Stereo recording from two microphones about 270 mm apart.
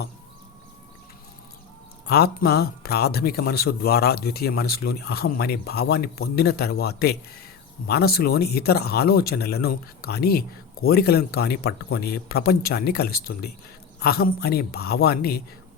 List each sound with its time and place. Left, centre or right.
2.0 s speech: left